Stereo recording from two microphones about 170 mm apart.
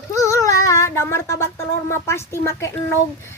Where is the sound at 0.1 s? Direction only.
20° left (ahead or behind).